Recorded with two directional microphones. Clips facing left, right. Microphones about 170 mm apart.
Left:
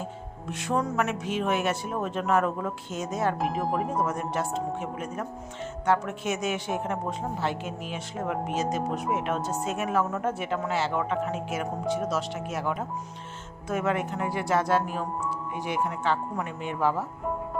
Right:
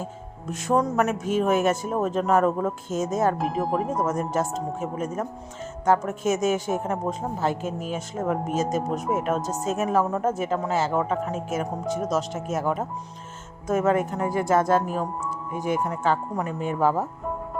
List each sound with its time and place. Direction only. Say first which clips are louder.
0.4 s speech: right 5 dB; 45° right (ahead or behind)
3.3 s speech: right 2 dB; centre (ahead or behind)
4.0 s speech: right 4 dB; 45° right (ahead or behind)